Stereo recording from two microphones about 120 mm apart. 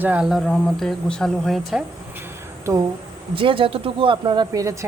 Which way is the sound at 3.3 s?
45° right (ahead or behind).